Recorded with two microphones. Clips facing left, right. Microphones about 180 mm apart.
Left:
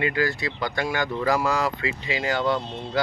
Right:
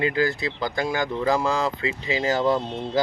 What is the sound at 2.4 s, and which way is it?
Speech, 25° right (ahead or behind).